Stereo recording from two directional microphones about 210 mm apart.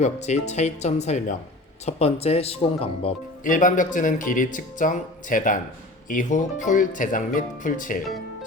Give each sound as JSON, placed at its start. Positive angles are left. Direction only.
{"t": 0.0, "sound": "speech", "side_deg": 35}
{"t": 3.4, "sound": "speech", "side_deg": 40}